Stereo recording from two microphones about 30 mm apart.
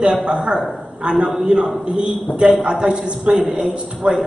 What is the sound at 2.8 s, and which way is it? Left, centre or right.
Speech, right.